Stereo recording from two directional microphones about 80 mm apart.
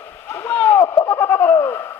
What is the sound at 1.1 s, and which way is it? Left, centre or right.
Bird, left.